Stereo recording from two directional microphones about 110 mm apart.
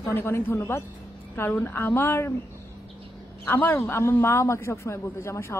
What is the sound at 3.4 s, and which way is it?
A man's voice, 15° left (ahead or behind).